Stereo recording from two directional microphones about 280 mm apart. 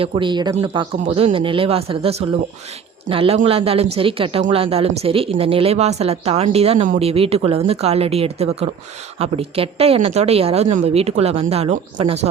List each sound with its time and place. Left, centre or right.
0.0 s speech: centre